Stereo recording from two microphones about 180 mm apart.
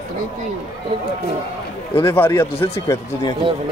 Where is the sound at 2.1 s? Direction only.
10° left (ahead or behind).